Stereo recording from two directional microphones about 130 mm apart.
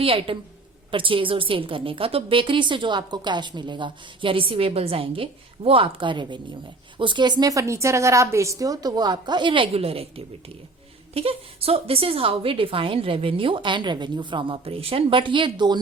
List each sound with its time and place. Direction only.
0.0 s a woman's voice: 45° right (ahead or behind)